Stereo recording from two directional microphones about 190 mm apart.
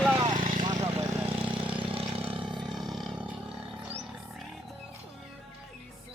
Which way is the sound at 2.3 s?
25° right (ahead or behind).